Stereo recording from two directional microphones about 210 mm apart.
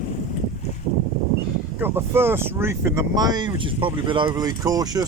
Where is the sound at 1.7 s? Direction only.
10° right (ahead or behind).